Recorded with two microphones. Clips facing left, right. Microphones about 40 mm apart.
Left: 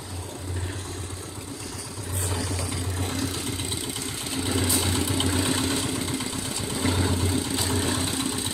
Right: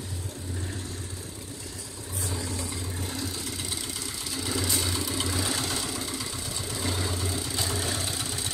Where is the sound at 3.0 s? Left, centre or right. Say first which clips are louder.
Left 6 dB; left.